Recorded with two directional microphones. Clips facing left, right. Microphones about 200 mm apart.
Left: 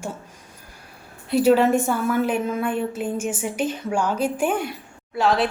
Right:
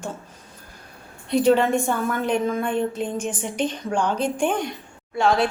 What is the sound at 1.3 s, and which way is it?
A woman's voice, 5° left (ahead or behind).